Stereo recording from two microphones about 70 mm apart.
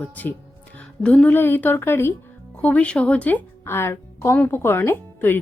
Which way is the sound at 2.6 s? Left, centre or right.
Centre.